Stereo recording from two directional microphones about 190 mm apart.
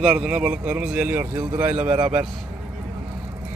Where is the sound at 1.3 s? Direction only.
20° right (ahead or behind).